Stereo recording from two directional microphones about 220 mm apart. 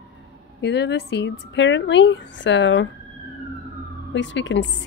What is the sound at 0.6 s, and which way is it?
Speech, 50° left (ahead or behind).